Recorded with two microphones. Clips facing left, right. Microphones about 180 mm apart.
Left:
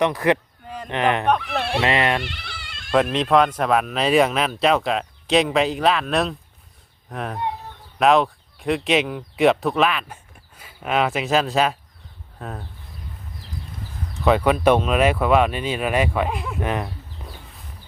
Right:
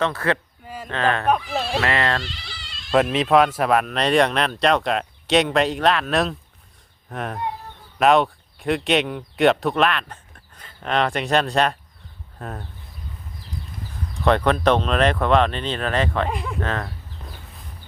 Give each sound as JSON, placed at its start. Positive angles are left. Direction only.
{"t": 0.0, "sound": "speech", "side_deg": 15}
{"t": 0.6, "sound": "a sound", "side_deg": -5}
{"t": 0.9, "sound": "speech", "side_deg": 20}
{"t": 1.4, "sound": "speech", "side_deg": 65}
{"t": 1.8, "sound": "speech", "side_deg": 20}
{"t": 2.2, "sound": "a sound", "side_deg": 60}
{"t": 2.9, "sound": "speech", "side_deg": 0}
{"t": 14.3, "sound": "speech", "side_deg": 5}
{"t": 16.6, "sound": "speech", "side_deg": 15}